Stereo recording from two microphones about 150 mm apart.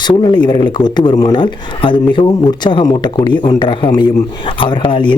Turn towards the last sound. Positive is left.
turn(degrees=30)  # may be behind; listen again after turning